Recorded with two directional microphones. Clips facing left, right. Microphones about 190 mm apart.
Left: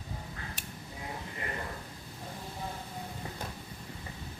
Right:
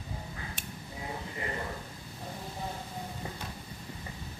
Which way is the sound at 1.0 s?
25° right (ahead or behind).